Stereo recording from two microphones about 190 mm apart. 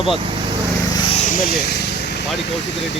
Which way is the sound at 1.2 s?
45° left (ahead or behind).